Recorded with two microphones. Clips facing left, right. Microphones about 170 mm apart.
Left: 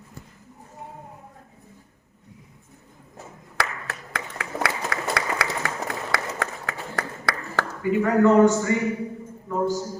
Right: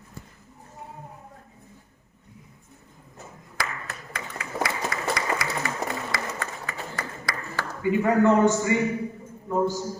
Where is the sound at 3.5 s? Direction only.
70° left (ahead or behind).